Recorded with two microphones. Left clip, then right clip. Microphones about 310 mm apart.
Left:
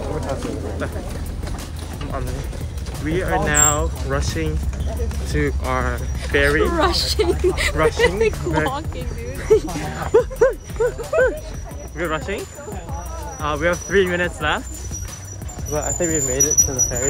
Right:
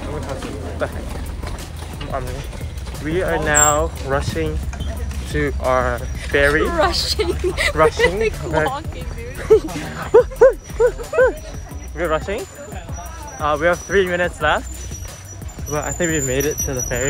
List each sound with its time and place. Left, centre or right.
3.1 s speech: centre
6.7 s speech: centre
7.7 s speech: centre
8.0 s speech: centre
15.7 s speech: right